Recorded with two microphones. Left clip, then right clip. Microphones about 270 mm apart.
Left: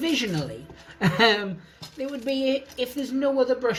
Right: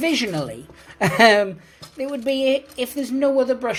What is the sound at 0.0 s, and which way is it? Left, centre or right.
Speech, right.